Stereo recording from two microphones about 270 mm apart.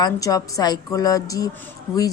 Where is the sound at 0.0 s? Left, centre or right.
Centre.